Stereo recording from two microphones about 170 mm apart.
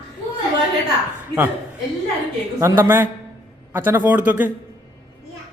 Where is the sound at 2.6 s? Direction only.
15° right (ahead or behind).